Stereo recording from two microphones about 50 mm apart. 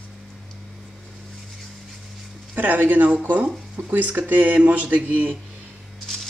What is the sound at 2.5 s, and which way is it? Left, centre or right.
Speech, right.